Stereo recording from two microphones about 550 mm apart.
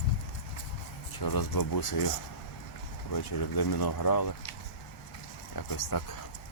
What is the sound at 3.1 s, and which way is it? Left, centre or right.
Speech, left.